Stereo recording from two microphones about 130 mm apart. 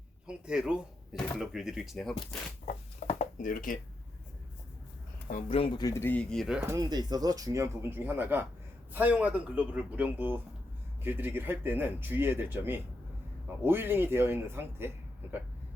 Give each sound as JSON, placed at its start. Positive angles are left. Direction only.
{"t": 0.3, "sound": "speech", "side_deg": -5}
{"t": 2.6, "sound": "a sound", "side_deg": 60}
{"t": 5.5, "sound": "speech", "side_deg": 45}
{"t": 5.8, "sound": "speech", "side_deg": 20}
{"t": 6.3, "sound": "speech", "side_deg": 0}
{"t": 6.7, "sound": "speech", "side_deg": -30}